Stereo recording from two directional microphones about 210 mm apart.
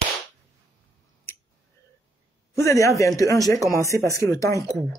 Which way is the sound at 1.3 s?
10° left (ahead or behind).